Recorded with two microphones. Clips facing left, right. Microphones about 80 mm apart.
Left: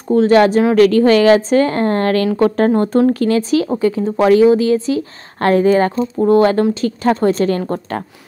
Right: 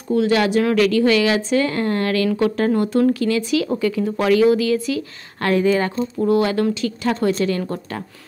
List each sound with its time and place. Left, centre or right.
0.1 s speech: left